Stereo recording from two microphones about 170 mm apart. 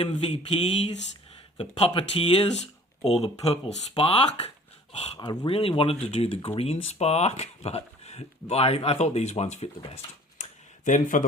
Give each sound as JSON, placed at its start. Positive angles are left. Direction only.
{"t": 0.0, "sound": "speech", "side_deg": 35}
{"t": 5.2, "sound": "speech", "side_deg": 25}